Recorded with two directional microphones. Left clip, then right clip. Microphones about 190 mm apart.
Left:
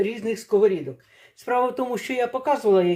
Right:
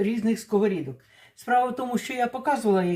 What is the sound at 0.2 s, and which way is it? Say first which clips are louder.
Speech: left 1 dB; 25° left (ahead or behind).